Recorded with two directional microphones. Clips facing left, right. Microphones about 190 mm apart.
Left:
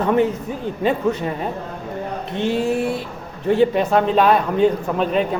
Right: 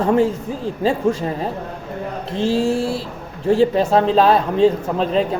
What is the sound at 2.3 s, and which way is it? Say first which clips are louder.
A man's voice: right 2 dB; 30° right (ahead or behind).